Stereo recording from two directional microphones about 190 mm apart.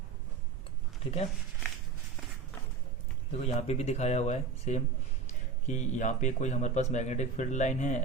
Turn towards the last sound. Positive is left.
turn(degrees=40)  # may be behind; listen again after turning